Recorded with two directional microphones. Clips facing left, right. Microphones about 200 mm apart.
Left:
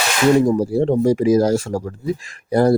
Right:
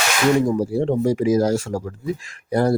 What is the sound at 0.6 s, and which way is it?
Speech, 35° left (ahead or behind).